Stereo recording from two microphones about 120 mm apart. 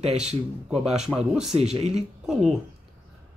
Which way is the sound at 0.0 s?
60° right (ahead or behind).